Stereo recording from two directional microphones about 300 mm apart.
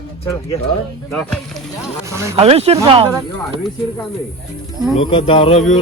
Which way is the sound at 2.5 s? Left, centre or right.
Centre.